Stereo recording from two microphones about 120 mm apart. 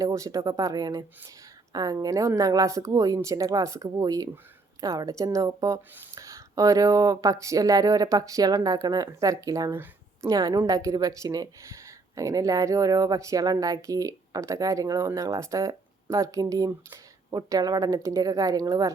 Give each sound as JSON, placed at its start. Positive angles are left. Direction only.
{"t": 0.0, "sound": "speech", "side_deg": -30}
{"t": 9.7, "sound": "a sound", "side_deg": -20}
{"t": 10.2, "sound": "speech", "side_deg": -30}